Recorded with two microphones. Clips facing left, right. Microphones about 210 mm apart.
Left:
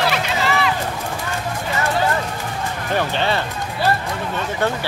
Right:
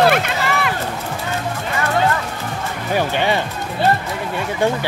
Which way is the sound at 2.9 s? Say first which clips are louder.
Right 2 dB; 15° right (ahead or behind).